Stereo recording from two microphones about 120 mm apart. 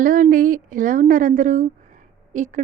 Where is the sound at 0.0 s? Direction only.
90° right.